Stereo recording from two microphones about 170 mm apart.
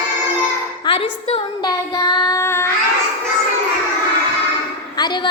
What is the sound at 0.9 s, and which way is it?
Music, 30° left (ahead or behind).